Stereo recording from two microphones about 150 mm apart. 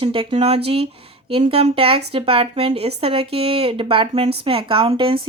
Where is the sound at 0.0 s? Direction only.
35° right (ahead or behind).